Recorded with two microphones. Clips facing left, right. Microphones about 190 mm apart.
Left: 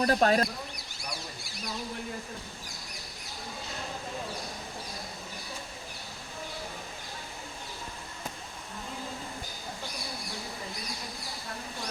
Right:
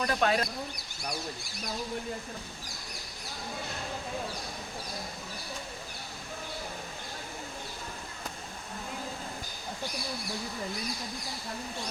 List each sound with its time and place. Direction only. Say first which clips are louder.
0.0 s speech: left 4 dB; 40° left (ahead or behind)